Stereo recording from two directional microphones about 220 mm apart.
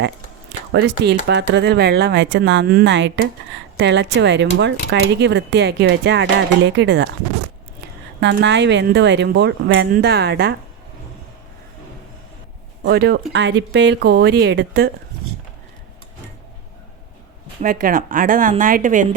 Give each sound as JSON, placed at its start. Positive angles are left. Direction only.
{"t": 0.7, "sound": "speech", "side_deg": -55}
{"t": 8.2, "sound": "speech", "side_deg": -55}
{"t": 12.8, "sound": "speech", "side_deg": -45}
{"t": 17.6, "sound": "speech", "side_deg": -40}